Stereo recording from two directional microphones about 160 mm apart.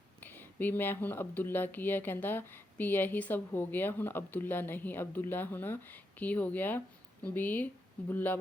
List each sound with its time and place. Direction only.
0.6 s speech: 10° left (ahead or behind)